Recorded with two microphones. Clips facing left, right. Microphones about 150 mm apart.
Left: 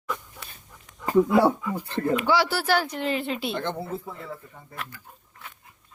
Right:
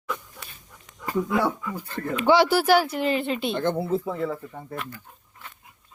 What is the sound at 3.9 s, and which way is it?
Speech, 90° right.